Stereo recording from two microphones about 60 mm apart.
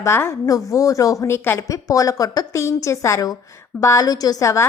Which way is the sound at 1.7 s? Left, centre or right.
Left.